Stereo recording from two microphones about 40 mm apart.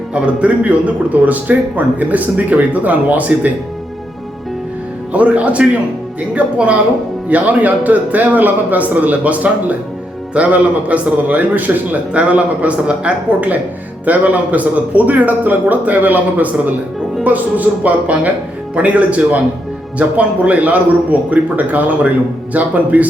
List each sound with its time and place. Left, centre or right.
0.1 s a man's voice: right
5.1 s a man's voice: right
12.1 s a man's voice: right
14.0 s a man's voice: right